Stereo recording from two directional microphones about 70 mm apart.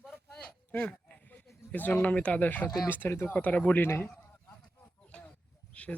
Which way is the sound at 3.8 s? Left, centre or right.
Left.